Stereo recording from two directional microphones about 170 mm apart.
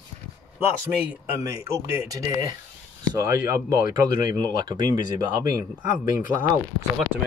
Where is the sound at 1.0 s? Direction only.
10° right (ahead or behind).